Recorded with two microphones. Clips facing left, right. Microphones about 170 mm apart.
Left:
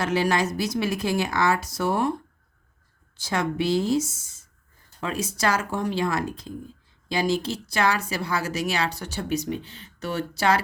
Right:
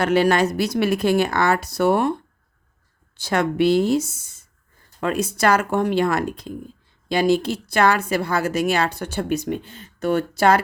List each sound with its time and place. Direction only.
0.0 s speech: 60° right (ahead or behind)
3.2 s speech: 65° right (ahead or behind)